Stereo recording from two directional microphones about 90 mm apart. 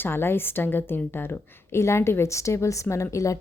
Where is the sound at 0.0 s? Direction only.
25° left (ahead or behind).